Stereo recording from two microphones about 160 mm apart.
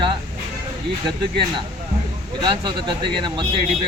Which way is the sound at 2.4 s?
30° right (ahead or behind).